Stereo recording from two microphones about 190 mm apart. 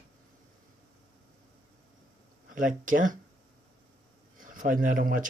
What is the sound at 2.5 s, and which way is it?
Speech, 45° right (ahead or behind).